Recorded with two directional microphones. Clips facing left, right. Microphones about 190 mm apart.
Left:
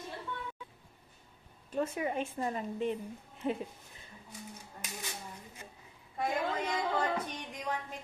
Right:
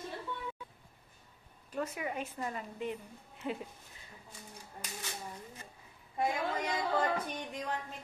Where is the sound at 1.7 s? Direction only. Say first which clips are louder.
Left 4 dB; 25° left (ahead or behind).